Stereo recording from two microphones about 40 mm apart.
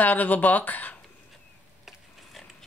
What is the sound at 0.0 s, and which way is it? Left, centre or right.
Speech, left.